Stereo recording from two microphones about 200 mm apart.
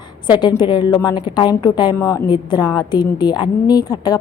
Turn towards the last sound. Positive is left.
turn(degrees=20)  # may be behind; listen again after turning